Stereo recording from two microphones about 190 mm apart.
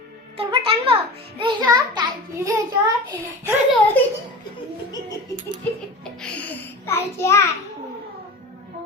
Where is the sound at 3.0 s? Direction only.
15° right (ahead or behind).